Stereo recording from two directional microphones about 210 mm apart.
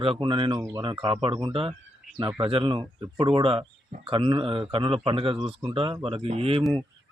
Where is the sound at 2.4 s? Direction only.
25° right (ahead or behind).